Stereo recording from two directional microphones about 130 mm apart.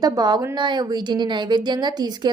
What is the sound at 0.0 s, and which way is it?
A woman's voice, 30° right (ahead or behind).